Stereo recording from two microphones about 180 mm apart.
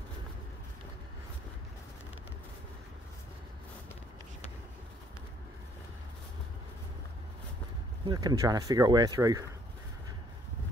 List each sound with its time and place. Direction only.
8.0 s speech: 25° right (ahead or behind)